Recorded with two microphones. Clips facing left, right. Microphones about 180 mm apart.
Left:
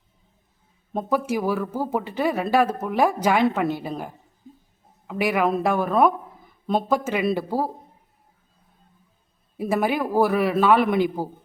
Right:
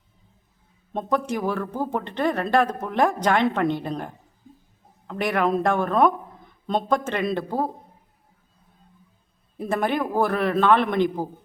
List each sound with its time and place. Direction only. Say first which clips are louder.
0.9 s speech: left 1 dB; 5° left (ahead or behind)
9.6 s a man's voice: left 1 dB; 5° left (ahead or behind)